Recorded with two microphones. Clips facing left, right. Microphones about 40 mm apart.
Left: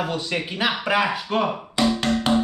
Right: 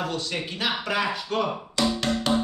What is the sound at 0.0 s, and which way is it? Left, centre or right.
Speech, left.